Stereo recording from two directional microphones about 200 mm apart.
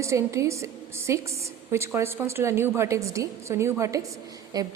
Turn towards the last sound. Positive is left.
turn(degrees=-15)  # may be behind; listen again after turning